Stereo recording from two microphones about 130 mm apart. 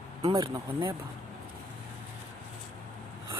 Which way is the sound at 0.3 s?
30° right (ahead or behind).